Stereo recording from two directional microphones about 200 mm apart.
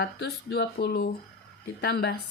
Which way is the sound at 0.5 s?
50° left (ahead or behind).